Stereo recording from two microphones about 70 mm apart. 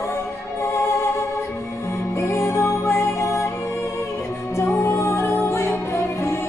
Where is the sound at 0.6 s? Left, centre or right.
Left.